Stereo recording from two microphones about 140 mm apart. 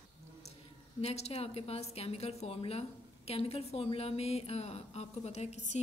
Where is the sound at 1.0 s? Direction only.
50° left (ahead or behind).